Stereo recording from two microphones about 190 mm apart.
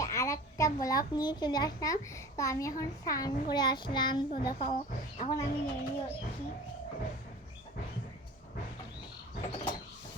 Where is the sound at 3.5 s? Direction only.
20° left (ahead or behind).